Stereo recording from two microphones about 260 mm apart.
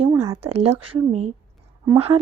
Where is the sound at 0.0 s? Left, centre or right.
Centre.